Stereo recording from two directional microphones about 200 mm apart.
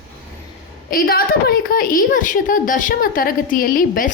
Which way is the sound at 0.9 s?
45° left (ahead or behind).